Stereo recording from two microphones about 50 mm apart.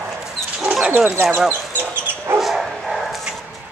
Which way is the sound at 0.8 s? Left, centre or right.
Right.